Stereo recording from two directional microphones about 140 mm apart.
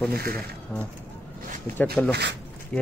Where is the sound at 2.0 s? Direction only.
5° left (ahead or behind).